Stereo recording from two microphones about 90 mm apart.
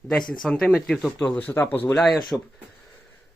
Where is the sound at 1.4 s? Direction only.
20° left (ahead or behind).